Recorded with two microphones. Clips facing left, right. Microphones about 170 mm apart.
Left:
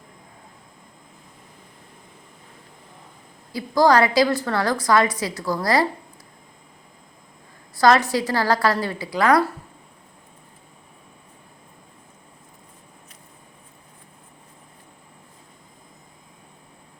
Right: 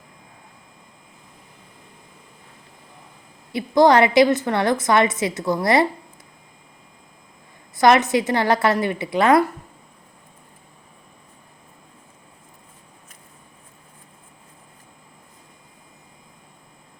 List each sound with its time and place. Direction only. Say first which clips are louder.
3.5 s a woman's voice: right 2 dB; 25° right (ahead or behind)
7.8 s a woman's voice: right 2 dB; 20° right (ahead or behind)